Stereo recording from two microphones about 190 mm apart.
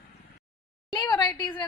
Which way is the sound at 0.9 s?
25° left (ahead or behind).